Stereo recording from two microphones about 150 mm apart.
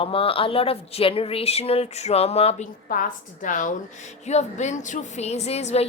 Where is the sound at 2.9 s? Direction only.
65° left (ahead or behind).